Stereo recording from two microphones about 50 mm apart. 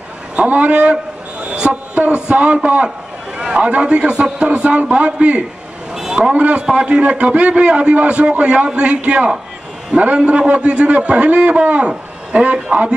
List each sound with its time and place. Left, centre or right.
0.5 s a man's voice: right
5.9 s a man's voice: centre